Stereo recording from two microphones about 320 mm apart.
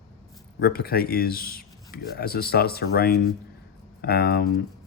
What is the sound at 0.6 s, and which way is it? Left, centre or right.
Speech, left.